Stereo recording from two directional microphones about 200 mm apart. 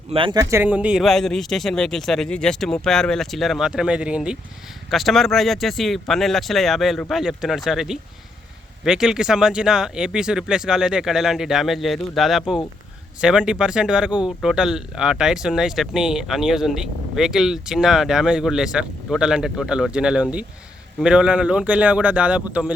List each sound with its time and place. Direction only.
0.1 s speech: 25° right (ahead or behind)
0.5 s speech: 10° right (ahead or behind)